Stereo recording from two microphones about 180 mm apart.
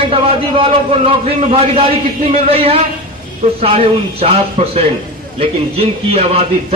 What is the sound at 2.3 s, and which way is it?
A man's voice, 35° right (ahead or behind).